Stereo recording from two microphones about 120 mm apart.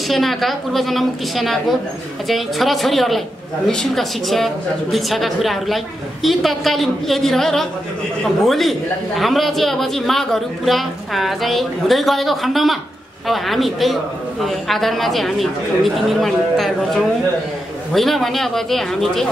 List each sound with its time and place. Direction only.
0.1 s a man's voice: centre (ahead or behind)